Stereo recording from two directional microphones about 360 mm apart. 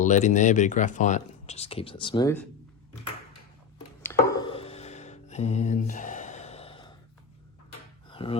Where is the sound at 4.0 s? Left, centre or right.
Centre.